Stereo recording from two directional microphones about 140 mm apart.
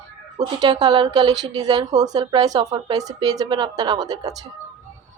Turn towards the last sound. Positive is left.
turn(degrees=-25)  # may be behind; listen again after turning